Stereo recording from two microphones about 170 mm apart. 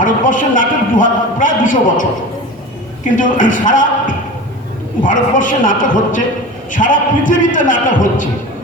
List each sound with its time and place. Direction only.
0.0 s a man's voice: 50° left (ahead or behind)